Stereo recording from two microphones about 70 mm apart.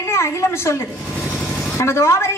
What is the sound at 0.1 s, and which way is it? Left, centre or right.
Speech, left.